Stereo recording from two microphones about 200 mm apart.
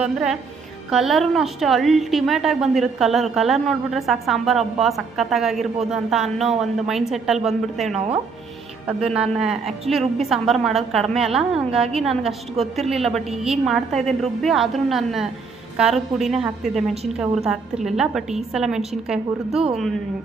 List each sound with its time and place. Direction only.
0.0 s a woman's voice: centre (ahead or behind)
7.9 s speech: 30° right (ahead or behind)
8.9 s a woman's voice: 5° right (ahead or behind)